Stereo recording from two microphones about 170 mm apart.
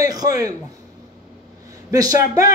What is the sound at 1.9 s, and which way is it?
Speech, 20° right (ahead or behind).